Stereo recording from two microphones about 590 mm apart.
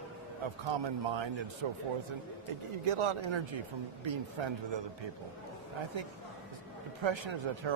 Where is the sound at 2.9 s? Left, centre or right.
Right.